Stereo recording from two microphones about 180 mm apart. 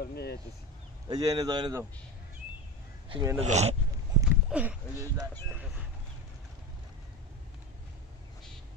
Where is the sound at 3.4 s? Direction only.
40° right (ahead or behind).